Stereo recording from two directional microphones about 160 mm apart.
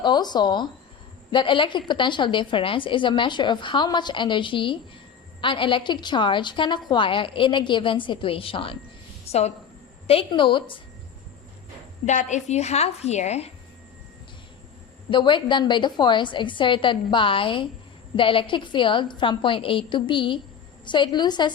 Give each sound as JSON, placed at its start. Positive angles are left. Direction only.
{"t": 0.0, "sound": "a woman's voice", "side_deg": 25}
{"t": 10.1, "sound": "a woman's voice", "side_deg": 35}
{"t": 12.0, "sound": "a woman's voice", "side_deg": 50}
{"t": 15.1, "sound": "a woman's voice", "side_deg": 30}